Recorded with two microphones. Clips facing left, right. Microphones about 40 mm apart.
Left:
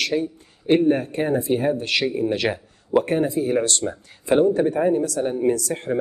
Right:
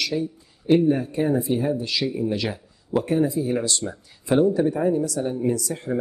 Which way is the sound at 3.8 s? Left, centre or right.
Left.